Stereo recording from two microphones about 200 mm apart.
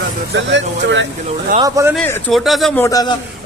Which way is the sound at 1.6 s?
15° right (ahead or behind).